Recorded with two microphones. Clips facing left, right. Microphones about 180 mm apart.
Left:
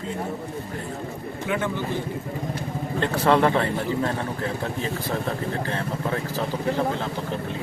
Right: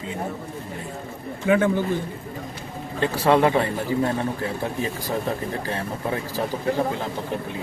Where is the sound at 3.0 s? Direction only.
10° right (ahead or behind).